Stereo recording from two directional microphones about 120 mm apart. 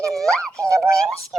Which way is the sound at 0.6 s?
25° right (ahead or behind).